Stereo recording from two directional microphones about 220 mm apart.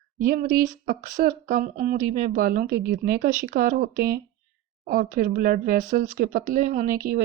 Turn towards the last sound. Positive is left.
turn(degrees=-40)  # may be behind; listen again after turning